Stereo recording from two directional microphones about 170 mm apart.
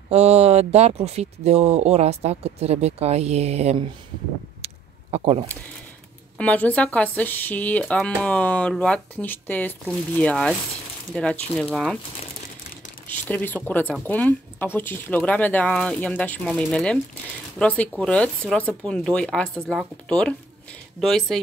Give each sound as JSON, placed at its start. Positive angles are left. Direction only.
{"t": 0.1, "sound": "speech", "side_deg": -40}
{"t": 4.6, "sound": "a sound", "side_deg": -40}
{"t": 5.1, "sound": "speech", "side_deg": -35}
{"t": 6.3, "sound": "speech", "side_deg": 10}
{"t": 13.0, "sound": "speech", "side_deg": 10}